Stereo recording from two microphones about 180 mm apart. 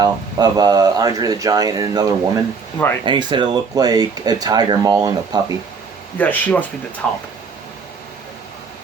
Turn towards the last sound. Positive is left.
turn(degrees=5)  # may be behind; listen again after turning